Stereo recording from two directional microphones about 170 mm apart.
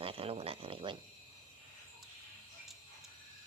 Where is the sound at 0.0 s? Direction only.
35° right (ahead or behind).